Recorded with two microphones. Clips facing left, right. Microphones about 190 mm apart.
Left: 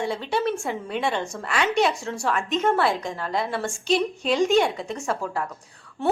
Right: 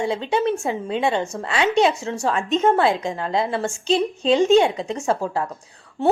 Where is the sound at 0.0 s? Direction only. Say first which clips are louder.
Right 4 dB; 25° right (ahead or behind).